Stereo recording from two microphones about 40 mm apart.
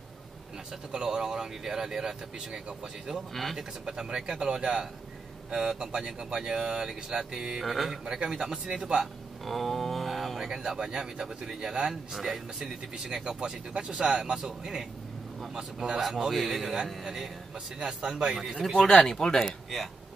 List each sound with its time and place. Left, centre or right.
0.9 s speech: centre
7.6 s speech: centre
7.9 s speech: centre
16.0 s speech: centre
18.8 s speech: centre